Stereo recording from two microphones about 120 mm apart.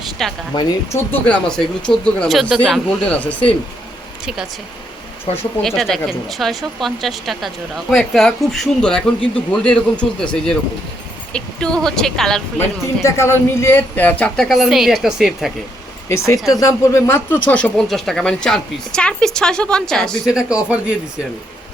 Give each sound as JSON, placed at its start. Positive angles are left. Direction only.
{"t": 0.2, "sound": "speech", "side_deg": 0}
{"t": 0.9, "sound": "speech", "side_deg": 20}
{"t": 1.5, "sound": "speech", "side_deg": 5}
{"t": 3.0, "sound": "speech", "side_deg": 10}
{"t": 5.6, "sound": "speech", "side_deg": 0}
{"t": 12.5, "sound": "speech", "side_deg": 25}
{"t": 16.0, "sound": "speech", "side_deg": 25}
{"t": 17.3, "sound": "speech", "side_deg": 10}
{"t": 20.3, "sound": "speech", "side_deg": -10}